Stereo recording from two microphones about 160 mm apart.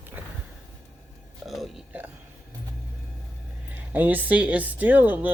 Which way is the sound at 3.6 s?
10° right (ahead or behind).